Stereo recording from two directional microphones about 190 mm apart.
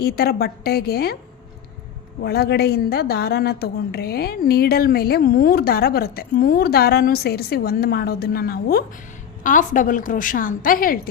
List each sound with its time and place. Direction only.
0.0 s a woman's voice: 55° left (ahead or behind)
2.2 s a woman's voice: 55° left (ahead or behind)